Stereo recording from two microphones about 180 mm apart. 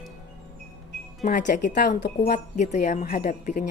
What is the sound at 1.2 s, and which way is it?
A woman's voice, 45° left (ahead or behind).